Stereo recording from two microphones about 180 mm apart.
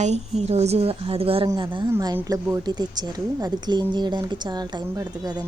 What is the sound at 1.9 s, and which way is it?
Speech, 15° right (ahead or behind).